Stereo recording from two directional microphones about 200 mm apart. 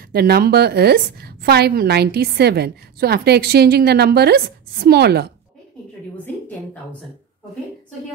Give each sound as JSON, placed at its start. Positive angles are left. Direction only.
{"t": 0.0, "sound": "a woman's voice", "side_deg": -50}
{"t": 6.2, "sound": "a woman's voice", "side_deg": 5}